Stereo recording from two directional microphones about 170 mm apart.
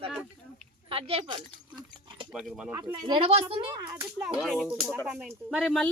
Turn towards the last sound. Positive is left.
turn(degrees=0)  # may be behind; listen again after turning